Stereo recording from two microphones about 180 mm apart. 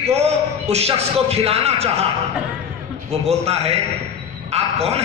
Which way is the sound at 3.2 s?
35° right (ahead or behind).